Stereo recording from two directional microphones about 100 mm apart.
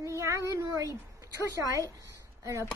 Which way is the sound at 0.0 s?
30° right (ahead or behind).